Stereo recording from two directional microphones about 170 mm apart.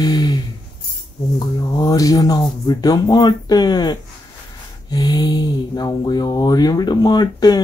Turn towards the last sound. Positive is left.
turn(degrees=25)  # may be behind; listen again after turning